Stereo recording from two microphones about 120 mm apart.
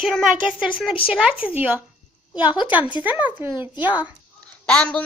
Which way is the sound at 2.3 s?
40° left (ahead or behind).